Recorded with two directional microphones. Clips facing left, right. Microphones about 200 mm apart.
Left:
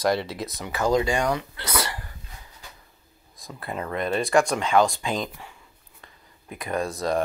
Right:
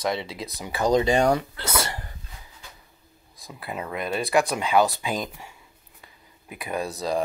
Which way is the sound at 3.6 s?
5° right (ahead or behind).